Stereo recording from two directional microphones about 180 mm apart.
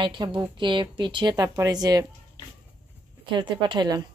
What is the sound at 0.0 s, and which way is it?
A woman's voice, 25° right (ahead or behind).